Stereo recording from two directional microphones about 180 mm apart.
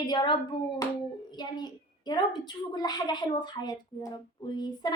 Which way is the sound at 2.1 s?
25° left (ahead or behind).